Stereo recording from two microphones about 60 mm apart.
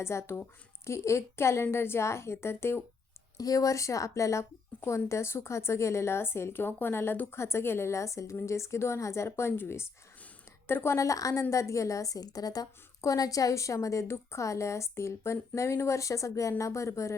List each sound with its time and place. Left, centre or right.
0.0 s a woman's voice: left
3.3 s a woman's voice: left
10.9 s a woman's voice: left